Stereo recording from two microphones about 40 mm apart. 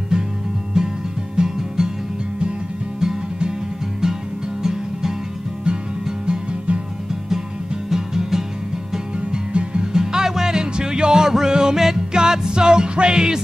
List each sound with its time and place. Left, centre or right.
0.1 s music: centre
3.0 s music: centre
6.0 s music: centre
7.9 s music: centre
9.1 s music: right